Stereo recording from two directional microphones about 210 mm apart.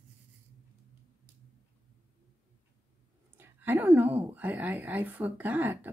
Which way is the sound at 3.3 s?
10° right (ahead or behind).